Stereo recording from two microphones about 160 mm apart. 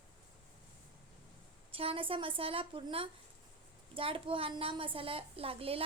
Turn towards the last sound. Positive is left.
turn(degrees=-35)  # may be behind; listen again after turning